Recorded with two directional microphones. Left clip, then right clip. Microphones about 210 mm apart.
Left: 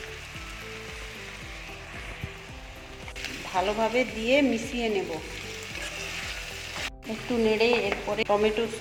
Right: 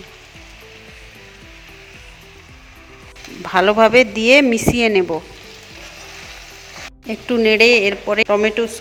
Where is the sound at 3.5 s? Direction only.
60° right (ahead or behind).